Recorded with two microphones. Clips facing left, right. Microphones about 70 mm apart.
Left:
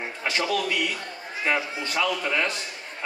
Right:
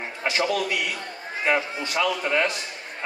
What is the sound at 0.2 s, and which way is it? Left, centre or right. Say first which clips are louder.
A man's voice: right 2 dB; centre.